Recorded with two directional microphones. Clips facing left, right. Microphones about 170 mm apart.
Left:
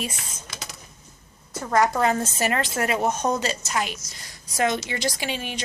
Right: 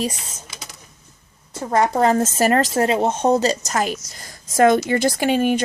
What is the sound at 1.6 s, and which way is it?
A woman's voice, 25° right (ahead or behind).